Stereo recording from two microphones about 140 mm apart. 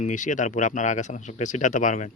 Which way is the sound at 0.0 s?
65° left (ahead or behind).